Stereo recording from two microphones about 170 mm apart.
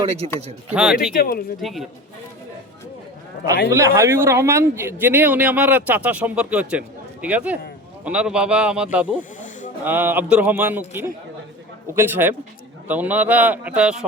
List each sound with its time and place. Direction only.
0.0 s speech: 40° right (ahead or behind)
0.7 s speech: 5° right (ahead or behind)
1.1 s speech: 60° left (ahead or behind)
1.5 s speech: centre (ahead or behind)
3.7 s speech: 15° right (ahead or behind)